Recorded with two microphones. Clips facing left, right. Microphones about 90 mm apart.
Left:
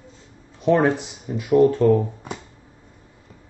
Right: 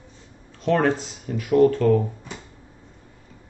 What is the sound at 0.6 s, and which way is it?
Speech, 15° left (ahead or behind).